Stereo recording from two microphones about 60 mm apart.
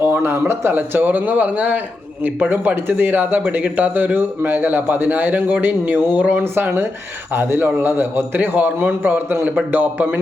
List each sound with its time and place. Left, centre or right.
0.0 s speech: right
0.8 s a man's voice: right
6.4 s a man's voice: right